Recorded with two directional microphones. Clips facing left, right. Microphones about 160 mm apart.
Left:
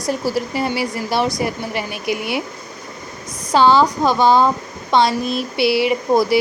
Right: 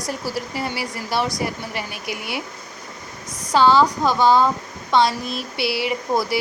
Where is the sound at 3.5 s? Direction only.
20° left (ahead or behind).